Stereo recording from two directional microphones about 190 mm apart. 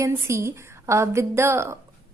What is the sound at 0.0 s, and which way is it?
A woman's voice, 15° right (ahead or behind).